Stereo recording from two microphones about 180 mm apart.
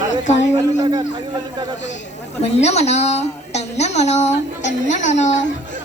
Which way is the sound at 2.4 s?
35° left (ahead or behind).